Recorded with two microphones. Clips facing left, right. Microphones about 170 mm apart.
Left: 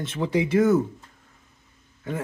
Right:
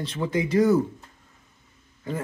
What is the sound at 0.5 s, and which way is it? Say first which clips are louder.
Speech: even; centre (ahead or behind).